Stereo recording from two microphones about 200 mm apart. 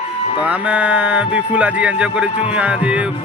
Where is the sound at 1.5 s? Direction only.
5° right (ahead or behind).